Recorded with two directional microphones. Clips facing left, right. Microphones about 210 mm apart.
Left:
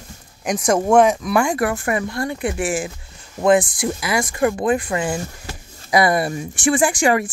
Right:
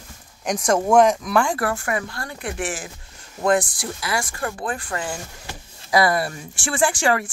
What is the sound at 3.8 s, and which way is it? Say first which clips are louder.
Speech: left 6 dB; 15° left (ahead or behind).